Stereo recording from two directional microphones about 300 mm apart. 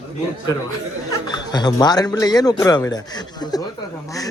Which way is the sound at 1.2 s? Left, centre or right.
Centre.